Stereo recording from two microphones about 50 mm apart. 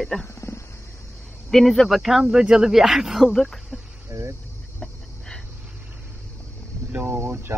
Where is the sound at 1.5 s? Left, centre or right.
Centre.